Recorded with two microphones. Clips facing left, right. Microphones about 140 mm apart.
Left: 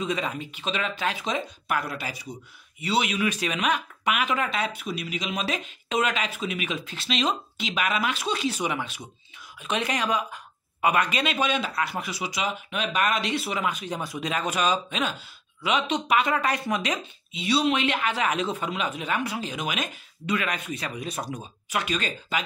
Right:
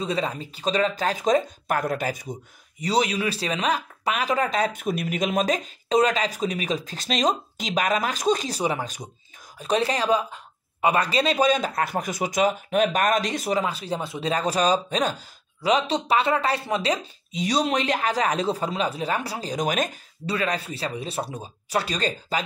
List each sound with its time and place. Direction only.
0.0 s speech: 35° right (ahead or behind)
14.3 s speech: 35° right (ahead or behind)